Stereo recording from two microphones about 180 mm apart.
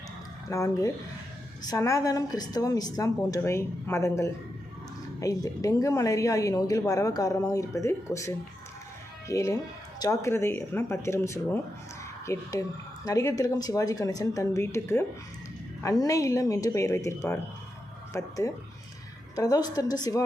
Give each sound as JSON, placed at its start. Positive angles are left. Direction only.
{"t": 0.4, "sound": "a woman's voice", "side_deg": 20}